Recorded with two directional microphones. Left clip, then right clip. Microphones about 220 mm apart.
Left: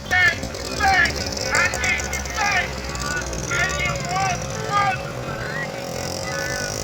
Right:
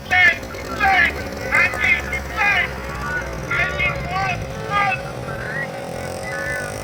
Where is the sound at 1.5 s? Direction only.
30° right (ahead or behind).